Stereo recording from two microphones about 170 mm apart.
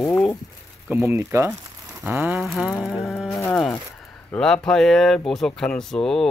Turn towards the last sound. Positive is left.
turn(degrees=5)  # may be behind; listen again after turning